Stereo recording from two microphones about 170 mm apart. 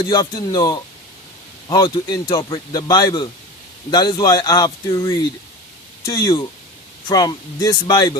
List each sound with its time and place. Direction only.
0.1 s speech: 25° left (ahead or behind)